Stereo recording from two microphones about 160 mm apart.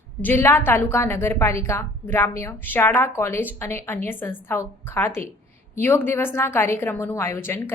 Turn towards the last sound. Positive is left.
turn(degrees=15)  # may be behind; listen again after turning